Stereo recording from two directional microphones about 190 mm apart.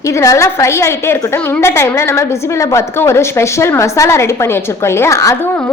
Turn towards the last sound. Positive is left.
turn(degrees=15)  # may be behind; listen again after turning